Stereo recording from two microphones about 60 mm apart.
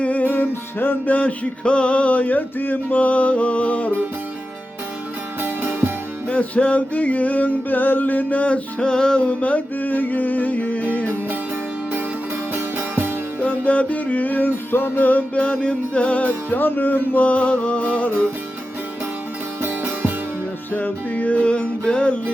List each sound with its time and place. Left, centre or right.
0.0 s music: left
5.4 s music: right
6.2 s music: left
12.5 s music: right
13.4 s music: left
16.5 s music: left
19.6 s music: right
20.7 s music: left